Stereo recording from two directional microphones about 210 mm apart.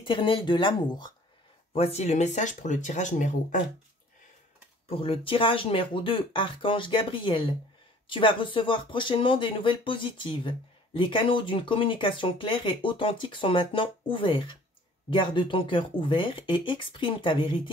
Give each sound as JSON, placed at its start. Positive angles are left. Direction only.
{"t": 0.0, "sound": "speech", "side_deg": 25}
{"t": 4.8, "sound": "speech", "side_deg": 25}